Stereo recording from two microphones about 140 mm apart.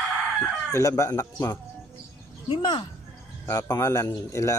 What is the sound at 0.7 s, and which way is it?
Speech, 20° left (ahead or behind).